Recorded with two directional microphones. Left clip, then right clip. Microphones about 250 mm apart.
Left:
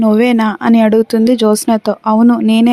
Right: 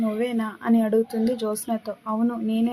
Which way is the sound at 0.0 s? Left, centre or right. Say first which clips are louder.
Left 14 dB; left.